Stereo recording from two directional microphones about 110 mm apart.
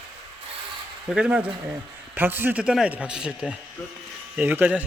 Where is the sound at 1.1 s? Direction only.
10° right (ahead or behind).